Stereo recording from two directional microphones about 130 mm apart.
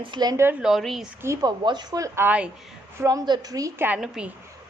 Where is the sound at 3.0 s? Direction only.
25° right (ahead or behind).